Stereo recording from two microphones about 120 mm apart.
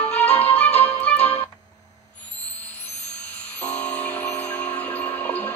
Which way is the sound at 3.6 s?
10° left (ahead or behind).